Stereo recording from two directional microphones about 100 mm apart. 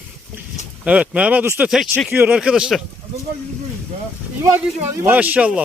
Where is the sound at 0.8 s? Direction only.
10° right (ahead or behind).